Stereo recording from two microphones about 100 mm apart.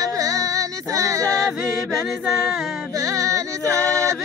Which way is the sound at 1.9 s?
5° right (ahead or behind).